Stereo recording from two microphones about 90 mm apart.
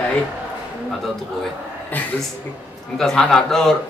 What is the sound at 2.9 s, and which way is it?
Speech, 5° left (ahead or behind).